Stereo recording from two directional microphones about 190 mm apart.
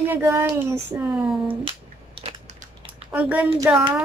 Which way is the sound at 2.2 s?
30° right (ahead or behind).